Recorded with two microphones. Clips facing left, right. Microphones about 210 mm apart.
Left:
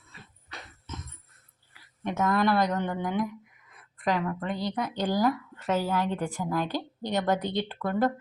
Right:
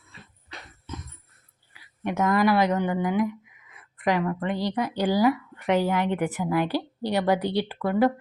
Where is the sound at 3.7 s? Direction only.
5° right (ahead or behind).